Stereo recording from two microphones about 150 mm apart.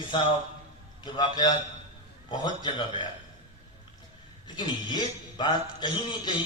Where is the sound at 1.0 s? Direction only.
30° left (ahead or behind).